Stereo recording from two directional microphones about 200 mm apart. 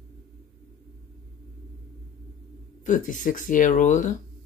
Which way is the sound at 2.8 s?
40° left (ahead or behind).